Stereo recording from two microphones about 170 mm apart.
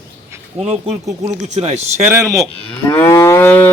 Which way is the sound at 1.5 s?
40° right (ahead or behind).